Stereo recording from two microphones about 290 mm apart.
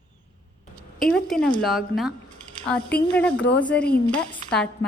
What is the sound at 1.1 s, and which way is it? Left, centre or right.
A woman's voice, centre.